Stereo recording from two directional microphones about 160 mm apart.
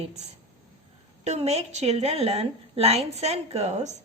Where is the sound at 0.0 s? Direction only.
45° right (ahead or behind).